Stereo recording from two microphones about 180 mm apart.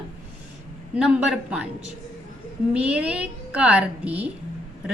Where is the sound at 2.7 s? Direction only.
5° right (ahead or behind).